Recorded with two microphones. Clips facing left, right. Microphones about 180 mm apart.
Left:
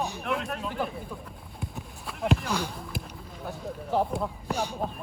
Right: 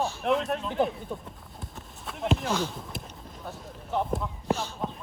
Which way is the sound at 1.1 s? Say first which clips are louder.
Right 4 dB; 25° right (ahead or behind).